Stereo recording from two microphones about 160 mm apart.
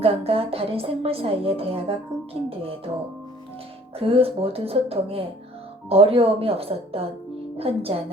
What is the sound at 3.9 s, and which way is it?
A woman's voice, 35° right (ahead or behind).